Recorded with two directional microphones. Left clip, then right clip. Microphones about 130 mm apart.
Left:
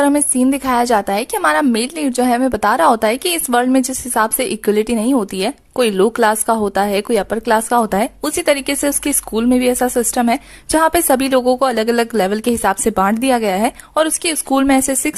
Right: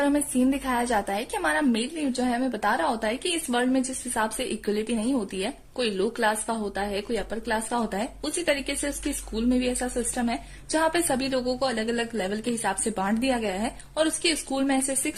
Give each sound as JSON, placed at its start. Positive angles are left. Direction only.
{"t": 0.0, "sound": "speech", "side_deg": 40}